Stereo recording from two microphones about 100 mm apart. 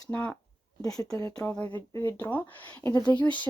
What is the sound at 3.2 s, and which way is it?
Speech, 15° left (ahead or behind).